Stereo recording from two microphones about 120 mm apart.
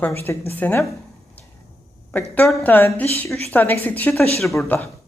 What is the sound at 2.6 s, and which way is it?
Speech, 15° left (ahead or behind).